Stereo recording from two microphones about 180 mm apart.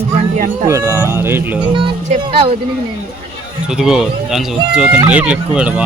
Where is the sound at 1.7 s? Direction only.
25° right (ahead or behind).